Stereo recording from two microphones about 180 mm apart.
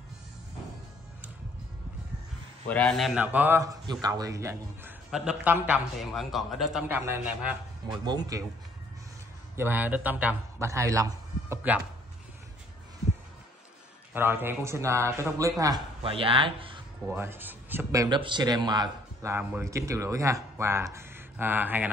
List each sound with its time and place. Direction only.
2.7 s a man's voice: 5° left (ahead or behind)
3.2 s speech: 10° right (ahead or behind)
3.8 s speech: 25° right (ahead or behind)
5.1 s speech: 5° right (ahead or behind)
7.9 s speech: 25° right (ahead or behind)
9.6 s a man's voice: 10° right (ahead or behind)
14.1 s speech: 10° right (ahead or behind)
16.0 s speech: 30° right (ahead or behind)
17.0 s speech: 10° right (ahead or behind)